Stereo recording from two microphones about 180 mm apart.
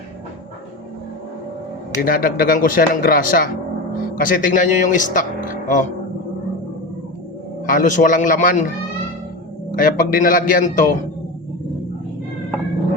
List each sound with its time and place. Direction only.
2.0 s speech: 55° left (ahead or behind)
7.7 s speech: 45° left (ahead or behind)
9.7 s speech: 50° left (ahead or behind)